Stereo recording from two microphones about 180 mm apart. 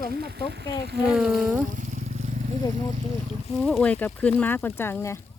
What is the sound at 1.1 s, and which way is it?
Speech, centre (ahead or behind).